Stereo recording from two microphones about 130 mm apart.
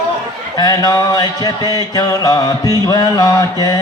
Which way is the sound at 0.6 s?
30° left (ahead or behind).